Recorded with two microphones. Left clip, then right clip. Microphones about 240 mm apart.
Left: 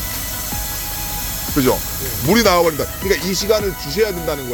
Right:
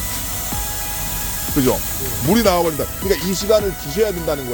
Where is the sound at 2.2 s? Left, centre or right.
Centre.